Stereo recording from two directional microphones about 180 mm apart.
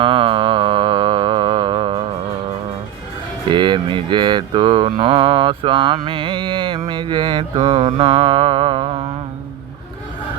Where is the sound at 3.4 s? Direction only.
25° right (ahead or behind).